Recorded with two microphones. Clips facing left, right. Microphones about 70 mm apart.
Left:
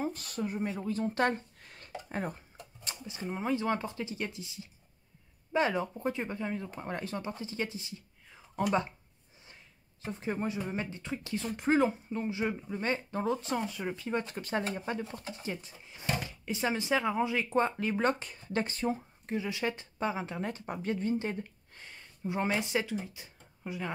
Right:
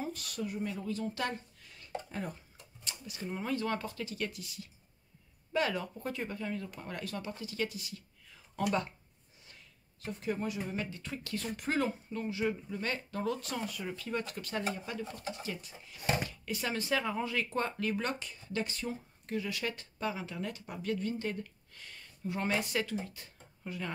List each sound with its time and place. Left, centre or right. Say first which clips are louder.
0.0 s speech: left 4 dB; left
2.0 s a sound: left 4 dB; left
3.2 s speech: left 3 dB; centre
10.0 s speech: left 1 dB; left